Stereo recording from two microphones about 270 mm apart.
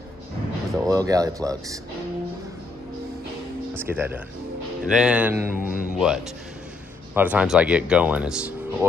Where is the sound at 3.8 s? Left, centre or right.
Centre.